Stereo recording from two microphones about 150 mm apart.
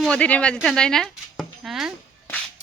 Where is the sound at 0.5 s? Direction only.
5° left (ahead or behind).